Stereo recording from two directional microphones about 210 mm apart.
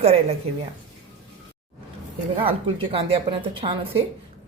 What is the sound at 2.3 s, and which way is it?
A woman's voice, 25° right (ahead or behind).